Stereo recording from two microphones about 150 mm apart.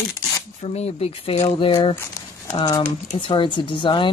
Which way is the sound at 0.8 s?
40° left (ahead or behind).